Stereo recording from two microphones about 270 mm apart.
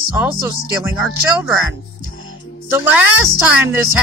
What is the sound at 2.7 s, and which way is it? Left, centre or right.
Speech, centre.